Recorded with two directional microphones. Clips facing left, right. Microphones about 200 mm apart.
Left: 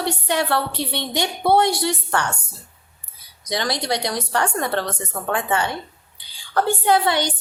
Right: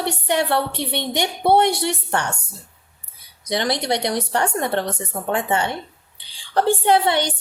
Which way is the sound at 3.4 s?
20° right (ahead or behind).